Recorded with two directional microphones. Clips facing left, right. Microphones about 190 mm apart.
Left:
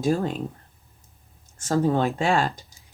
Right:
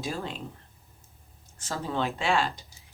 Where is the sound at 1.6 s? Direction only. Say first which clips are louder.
Left 9 dB; 50° left (ahead or behind).